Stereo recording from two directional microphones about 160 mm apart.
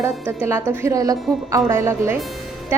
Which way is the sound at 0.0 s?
15° right (ahead or behind).